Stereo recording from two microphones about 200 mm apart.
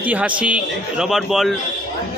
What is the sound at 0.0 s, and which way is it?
Speech, 5° right (ahead or behind).